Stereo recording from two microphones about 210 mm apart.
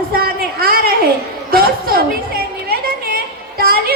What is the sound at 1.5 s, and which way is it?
Chatter, 45° right (ahead or behind).